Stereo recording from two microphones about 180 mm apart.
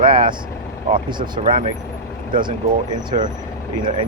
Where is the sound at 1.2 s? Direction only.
45° right (ahead or behind).